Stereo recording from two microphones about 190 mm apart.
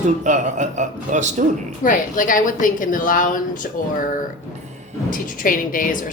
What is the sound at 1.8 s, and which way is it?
A woman's voice, 45° left (ahead or behind).